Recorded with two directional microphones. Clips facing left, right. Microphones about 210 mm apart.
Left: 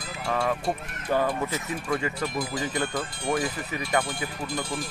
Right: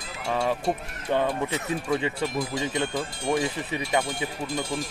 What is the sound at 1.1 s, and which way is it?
Speech, 20° right (ahead or behind).